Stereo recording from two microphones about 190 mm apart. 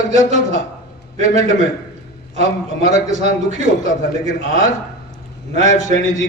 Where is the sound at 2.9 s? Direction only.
35° right (ahead or behind).